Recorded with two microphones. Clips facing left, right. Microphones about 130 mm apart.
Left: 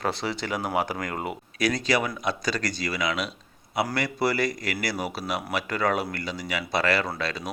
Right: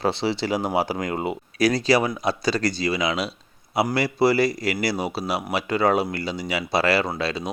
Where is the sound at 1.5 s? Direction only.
35° right (ahead or behind).